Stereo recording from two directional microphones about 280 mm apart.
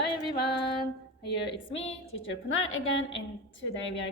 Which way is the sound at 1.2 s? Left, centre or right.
Left.